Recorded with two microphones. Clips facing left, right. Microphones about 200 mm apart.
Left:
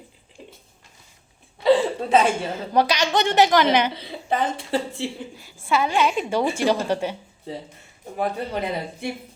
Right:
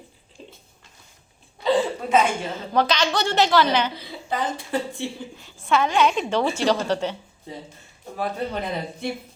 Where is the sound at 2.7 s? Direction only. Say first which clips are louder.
Left 1 dB; 15° left (ahead or behind).